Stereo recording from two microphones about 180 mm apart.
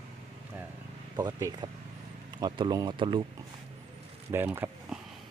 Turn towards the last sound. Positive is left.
turn(degrees=-10)  # may be behind; listen again after turning